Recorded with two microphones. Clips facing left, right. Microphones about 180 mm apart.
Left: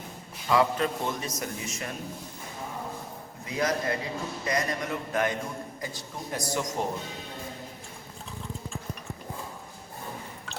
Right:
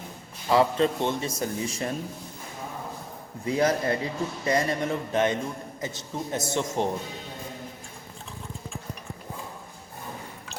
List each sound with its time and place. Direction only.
0.4 s a man's voice: 30° right (ahead or behind)
3.4 s a man's voice: 30° right (ahead or behind)